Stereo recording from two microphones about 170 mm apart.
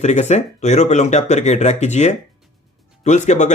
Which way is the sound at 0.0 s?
40° left (ahead or behind).